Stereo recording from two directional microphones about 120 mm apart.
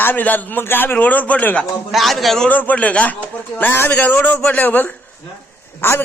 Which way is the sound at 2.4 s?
15° left (ahead or behind).